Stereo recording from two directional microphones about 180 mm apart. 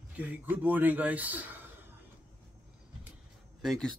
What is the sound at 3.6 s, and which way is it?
Speech, centre (ahead or behind).